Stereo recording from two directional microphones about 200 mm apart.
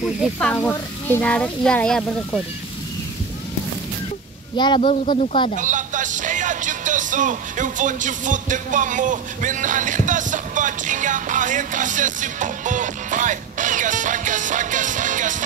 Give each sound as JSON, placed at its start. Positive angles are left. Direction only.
{"t": 0.2, "sound": "speech", "side_deg": 5}
{"t": 4.6, "sound": "speech", "side_deg": 25}
{"t": 5.0, "sound": "speech", "side_deg": 35}
{"t": 5.6, "sound": "speech", "side_deg": -40}